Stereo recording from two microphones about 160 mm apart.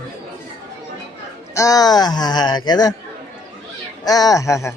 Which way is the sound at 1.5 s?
20° left (ahead or behind).